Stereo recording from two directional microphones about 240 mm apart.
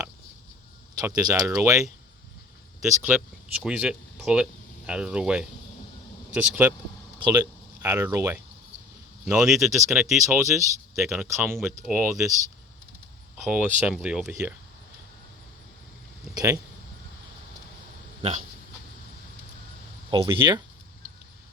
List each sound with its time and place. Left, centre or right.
0.9 s speech: centre
3.0 s speech: centre
7.2 s speech: centre
10.9 s speech: centre
13.3 s speech: centre
16.3 s speech: centre
18.2 s speech: right
20.1 s speech: centre